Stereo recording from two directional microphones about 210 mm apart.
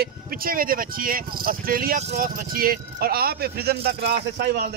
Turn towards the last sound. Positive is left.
turn(degrees=-45)  # may be behind; listen again after turning